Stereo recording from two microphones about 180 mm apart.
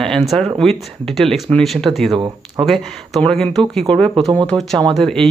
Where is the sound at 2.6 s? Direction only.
Centre (ahead or behind).